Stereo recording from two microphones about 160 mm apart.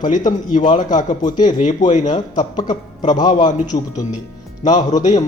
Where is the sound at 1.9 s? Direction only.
45° left (ahead or behind).